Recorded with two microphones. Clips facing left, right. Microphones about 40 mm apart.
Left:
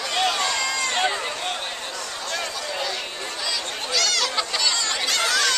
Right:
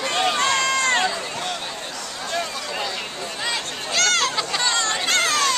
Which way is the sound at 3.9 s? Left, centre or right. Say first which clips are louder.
Right 3 dB; right.